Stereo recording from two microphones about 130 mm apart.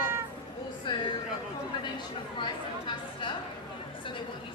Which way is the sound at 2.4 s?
40° left (ahead or behind).